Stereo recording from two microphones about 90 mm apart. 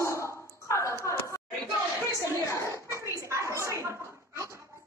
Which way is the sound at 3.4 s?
35° right (ahead or behind).